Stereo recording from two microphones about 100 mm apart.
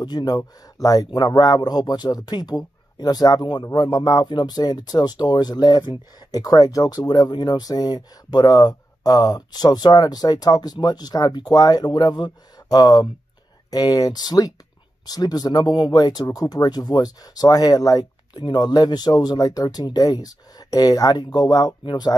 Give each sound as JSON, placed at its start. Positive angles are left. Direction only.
{"t": 0.0, "sound": "speech", "side_deg": 45}